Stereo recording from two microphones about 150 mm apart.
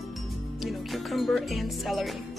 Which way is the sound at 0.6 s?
Centre (ahead or behind).